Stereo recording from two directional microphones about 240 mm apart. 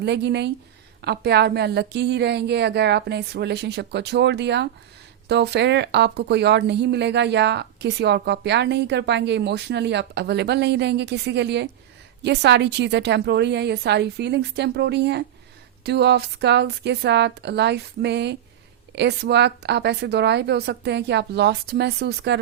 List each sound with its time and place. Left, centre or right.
0.0 s speech: right